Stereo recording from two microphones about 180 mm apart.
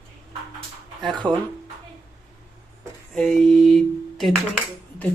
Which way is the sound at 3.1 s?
Centre (ahead or behind).